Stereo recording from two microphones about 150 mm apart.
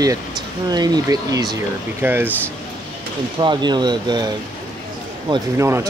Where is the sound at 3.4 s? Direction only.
30° right (ahead or behind).